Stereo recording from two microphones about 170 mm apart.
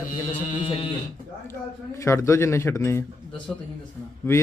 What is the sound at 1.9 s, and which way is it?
A man's voice, 15° left (ahead or behind).